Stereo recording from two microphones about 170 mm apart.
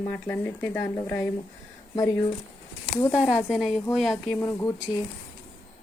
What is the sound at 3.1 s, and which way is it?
Speech, 5° right (ahead or behind).